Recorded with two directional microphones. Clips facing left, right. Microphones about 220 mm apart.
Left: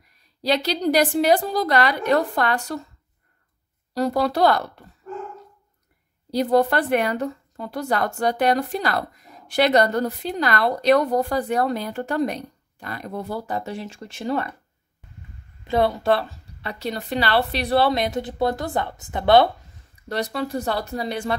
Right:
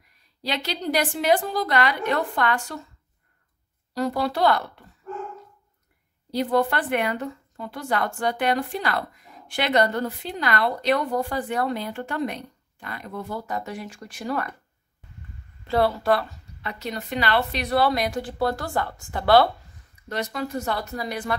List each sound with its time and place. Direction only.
0.4 s speech: 40° left (ahead or behind)
3.9 s speech: 40° left (ahead or behind)
6.3 s speech: 40° left (ahead or behind)
15.6 s speech: 15° left (ahead or behind)
20.1 s speech: 35° left (ahead or behind)